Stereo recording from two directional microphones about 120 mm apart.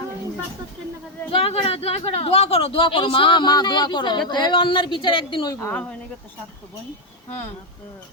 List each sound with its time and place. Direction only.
1.3 s a woman's voice: 50° left (ahead or behind)
5.6 s speech: 15° left (ahead or behind)